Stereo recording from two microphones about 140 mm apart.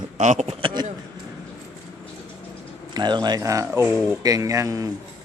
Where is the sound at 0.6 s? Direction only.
35° right (ahead or behind).